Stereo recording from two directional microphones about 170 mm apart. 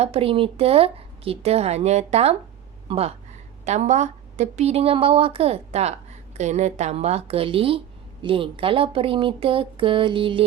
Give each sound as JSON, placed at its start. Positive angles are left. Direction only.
{"t": 0.0, "sound": "a woman's voice", "side_deg": -35}